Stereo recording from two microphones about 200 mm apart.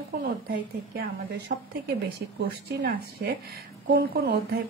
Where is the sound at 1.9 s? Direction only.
50° right (ahead or behind).